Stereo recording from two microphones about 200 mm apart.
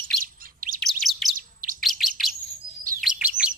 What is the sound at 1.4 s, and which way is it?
Chirp, 45° right (ahead or behind).